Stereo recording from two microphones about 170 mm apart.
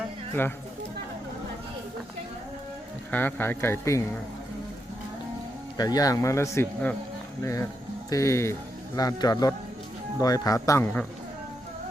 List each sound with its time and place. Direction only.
3.1 s speech: 10° left (ahead or behind)
5.7 s speech: 25° left (ahead or behind)